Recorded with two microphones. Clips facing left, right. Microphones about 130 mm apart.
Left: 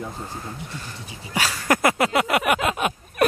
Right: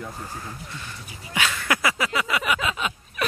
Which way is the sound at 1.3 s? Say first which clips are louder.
Left 3 dB; 35° left (ahead or behind).